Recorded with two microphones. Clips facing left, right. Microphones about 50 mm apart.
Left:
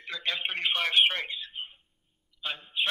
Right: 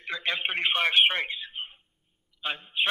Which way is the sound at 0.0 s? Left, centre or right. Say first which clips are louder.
Right 3 dB; centre.